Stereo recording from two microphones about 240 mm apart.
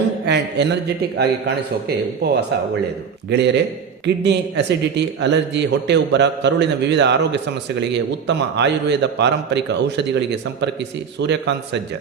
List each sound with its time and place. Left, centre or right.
0.3 s a man's voice: right